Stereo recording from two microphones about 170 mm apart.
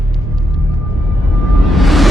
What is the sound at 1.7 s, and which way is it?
Music, centre (ahead or behind).